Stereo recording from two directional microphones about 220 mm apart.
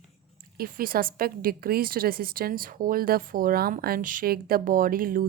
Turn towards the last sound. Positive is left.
turn(degrees=-40)  # may be behind; listen again after turning